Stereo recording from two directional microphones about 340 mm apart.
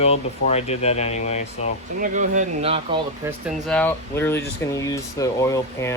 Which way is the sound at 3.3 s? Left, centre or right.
Centre.